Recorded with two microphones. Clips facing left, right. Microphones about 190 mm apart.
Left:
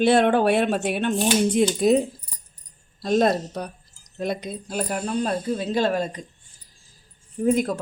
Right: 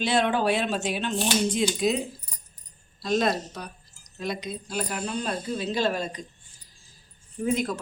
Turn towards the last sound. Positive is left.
turn(degrees=50)  # may be behind; listen again after turning